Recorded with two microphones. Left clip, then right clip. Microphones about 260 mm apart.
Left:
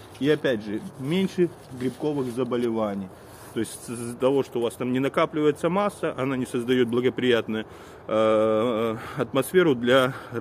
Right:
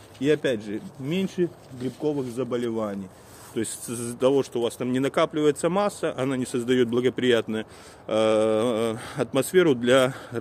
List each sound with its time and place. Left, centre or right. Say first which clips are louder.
0.2 s speech: even; right